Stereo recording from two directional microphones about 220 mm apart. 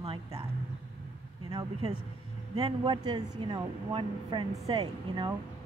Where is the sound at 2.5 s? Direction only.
25° right (ahead or behind).